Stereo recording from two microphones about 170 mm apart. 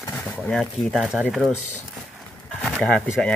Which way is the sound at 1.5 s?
45° left (ahead or behind).